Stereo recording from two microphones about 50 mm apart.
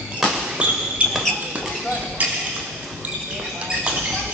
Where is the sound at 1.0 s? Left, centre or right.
Right.